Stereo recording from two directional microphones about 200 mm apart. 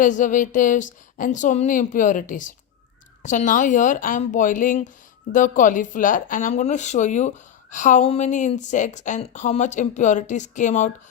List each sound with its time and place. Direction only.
0.0 s speech: 40° left (ahead or behind)